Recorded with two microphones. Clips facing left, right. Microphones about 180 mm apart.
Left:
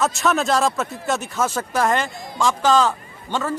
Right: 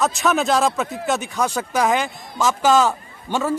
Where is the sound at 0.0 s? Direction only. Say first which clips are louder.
Right 1 dB; centre (ahead or behind).